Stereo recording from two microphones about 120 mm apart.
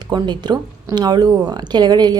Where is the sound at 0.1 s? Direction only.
35° right (ahead or behind).